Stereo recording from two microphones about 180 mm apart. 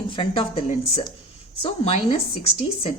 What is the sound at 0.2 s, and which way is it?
A woman's voice, 35° left (ahead or behind).